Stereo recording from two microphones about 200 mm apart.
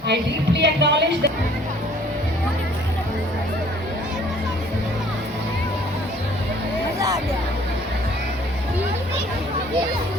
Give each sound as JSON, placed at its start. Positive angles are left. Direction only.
{"t": 0.1, "sound": "speech", "side_deg": -60}